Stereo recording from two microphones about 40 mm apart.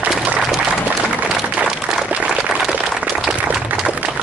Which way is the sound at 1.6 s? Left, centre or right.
Centre.